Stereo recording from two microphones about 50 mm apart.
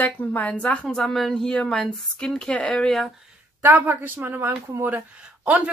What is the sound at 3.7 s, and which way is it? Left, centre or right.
Speech, right.